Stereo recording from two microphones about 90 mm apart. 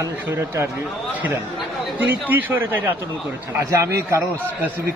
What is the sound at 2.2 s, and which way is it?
Speech, 20° right (ahead or behind).